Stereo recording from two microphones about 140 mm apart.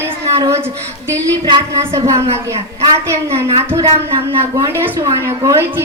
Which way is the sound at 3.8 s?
40° right (ahead or behind).